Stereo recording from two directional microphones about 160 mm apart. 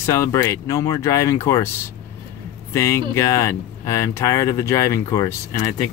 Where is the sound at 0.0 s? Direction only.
20° left (ahead or behind).